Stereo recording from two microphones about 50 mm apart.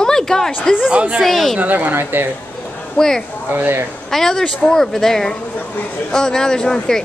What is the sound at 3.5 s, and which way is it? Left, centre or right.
Speech, right.